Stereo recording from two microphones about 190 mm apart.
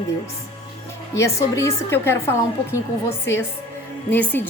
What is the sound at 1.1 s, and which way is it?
A woman's voice, 15° left (ahead or behind).